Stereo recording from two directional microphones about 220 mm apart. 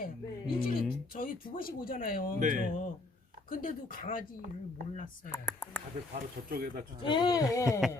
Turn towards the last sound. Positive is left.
turn(degrees=15)  # may be behind; listen again after turning